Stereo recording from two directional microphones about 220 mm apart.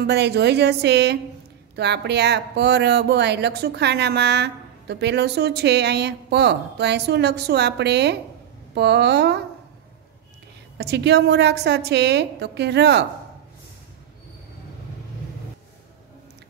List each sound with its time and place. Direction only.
0.0 s speech: 50° right (ahead or behind)
10.8 s speech: 50° right (ahead or behind)